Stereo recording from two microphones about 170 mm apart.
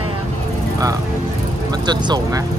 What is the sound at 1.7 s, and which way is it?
Vehicle, 25° right (ahead or behind).